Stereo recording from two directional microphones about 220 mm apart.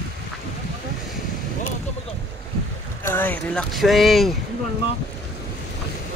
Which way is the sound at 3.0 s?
10° left (ahead or behind).